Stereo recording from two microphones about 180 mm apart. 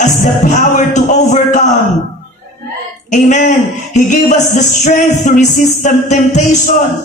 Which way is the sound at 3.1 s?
45° left (ahead or behind).